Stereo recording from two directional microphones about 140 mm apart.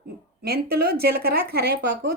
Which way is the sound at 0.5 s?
90° right.